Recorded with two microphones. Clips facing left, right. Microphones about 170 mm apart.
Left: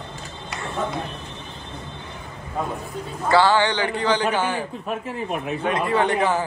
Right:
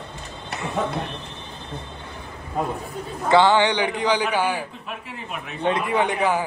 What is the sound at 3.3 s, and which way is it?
A man's voice, 20° right (ahead or behind).